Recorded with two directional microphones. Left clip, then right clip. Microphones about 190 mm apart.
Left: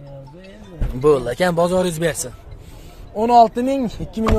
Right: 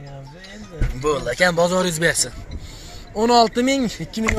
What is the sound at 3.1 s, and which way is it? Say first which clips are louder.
Speech: left 3 dB; 10° left (ahead or behind).